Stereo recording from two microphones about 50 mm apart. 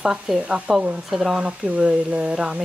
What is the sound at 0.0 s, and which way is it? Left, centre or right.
Speech, centre.